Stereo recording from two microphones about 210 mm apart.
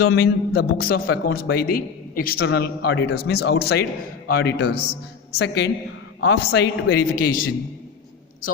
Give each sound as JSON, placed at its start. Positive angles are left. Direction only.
{"t": 0.1, "sound": "a man's voice", "side_deg": 50}